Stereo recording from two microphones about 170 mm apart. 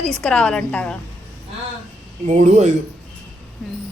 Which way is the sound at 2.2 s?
40° right (ahead or behind).